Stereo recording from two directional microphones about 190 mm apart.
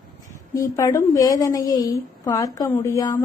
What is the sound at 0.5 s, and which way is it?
A woman's voice, 20° left (ahead or behind).